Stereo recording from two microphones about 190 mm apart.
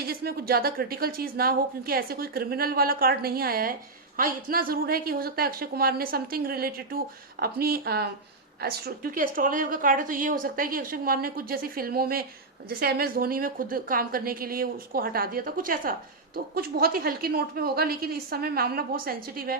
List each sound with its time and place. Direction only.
0.0 s a woman's voice: 55° right (ahead or behind)